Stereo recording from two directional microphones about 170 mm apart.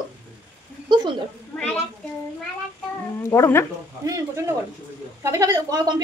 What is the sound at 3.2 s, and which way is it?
Speech, 15° left (ahead or behind).